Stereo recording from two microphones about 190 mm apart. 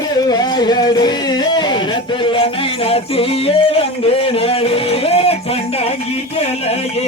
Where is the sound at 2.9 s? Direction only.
30° left (ahead or behind).